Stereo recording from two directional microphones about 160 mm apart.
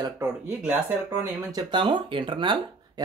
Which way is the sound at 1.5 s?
30° right (ahead or behind).